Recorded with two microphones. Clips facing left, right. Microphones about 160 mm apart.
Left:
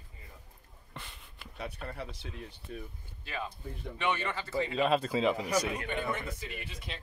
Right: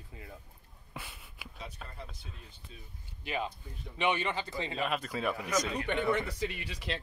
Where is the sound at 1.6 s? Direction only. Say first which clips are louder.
Left 7 dB; 65° left (ahead or behind).